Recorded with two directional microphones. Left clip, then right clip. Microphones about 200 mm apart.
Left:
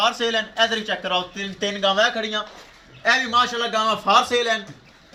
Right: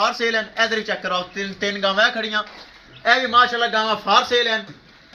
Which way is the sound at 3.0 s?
65° left (ahead or behind).